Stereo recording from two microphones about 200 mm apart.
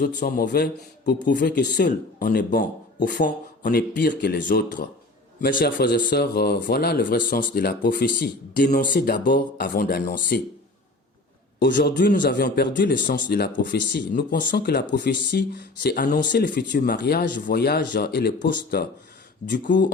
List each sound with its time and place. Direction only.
0.0 s speech: 50° left (ahead or behind)
11.6 s speech: 55° left (ahead or behind)